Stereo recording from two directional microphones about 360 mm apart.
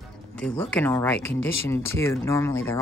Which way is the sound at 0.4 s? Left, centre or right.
Centre.